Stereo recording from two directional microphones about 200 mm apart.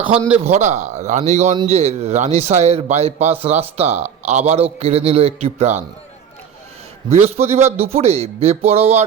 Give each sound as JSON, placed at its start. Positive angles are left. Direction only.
{"t": 0.4, "sound": "a man's voice", "side_deg": -35}
{"t": 7.1, "sound": "a man's voice", "side_deg": -30}